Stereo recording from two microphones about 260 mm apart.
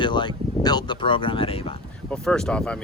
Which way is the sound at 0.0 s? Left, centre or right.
Centre.